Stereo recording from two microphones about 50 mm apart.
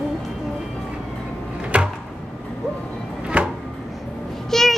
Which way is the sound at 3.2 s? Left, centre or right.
Centre.